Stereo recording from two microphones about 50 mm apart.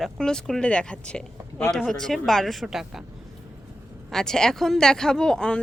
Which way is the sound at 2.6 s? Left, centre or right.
Centre.